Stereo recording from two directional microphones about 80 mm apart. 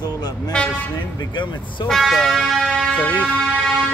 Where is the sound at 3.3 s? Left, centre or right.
Centre.